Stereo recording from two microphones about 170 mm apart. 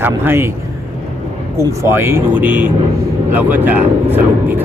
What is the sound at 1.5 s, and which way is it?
Speech, 15° right (ahead or behind).